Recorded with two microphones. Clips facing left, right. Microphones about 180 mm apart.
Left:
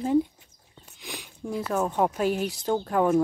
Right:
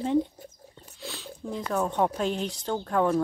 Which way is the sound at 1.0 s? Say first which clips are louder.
Even; 15° left (ahead or behind).